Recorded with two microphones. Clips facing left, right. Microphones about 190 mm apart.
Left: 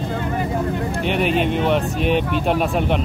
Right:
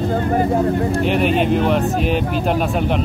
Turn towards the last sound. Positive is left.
turn(degrees=0)  # may be behind; listen again after turning